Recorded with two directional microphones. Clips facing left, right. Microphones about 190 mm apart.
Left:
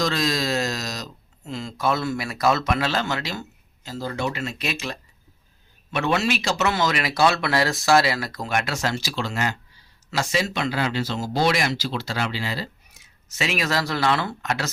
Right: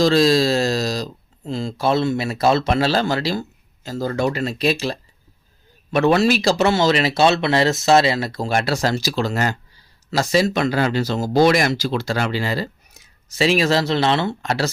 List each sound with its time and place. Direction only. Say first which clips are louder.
0.0 s speech: right 9 dB; 30° right (ahead or behind)